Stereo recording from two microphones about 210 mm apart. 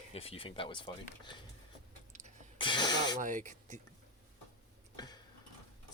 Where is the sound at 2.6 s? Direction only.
20° left (ahead or behind).